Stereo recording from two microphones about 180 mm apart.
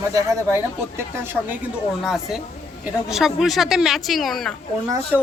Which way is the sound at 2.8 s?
Centre (ahead or behind).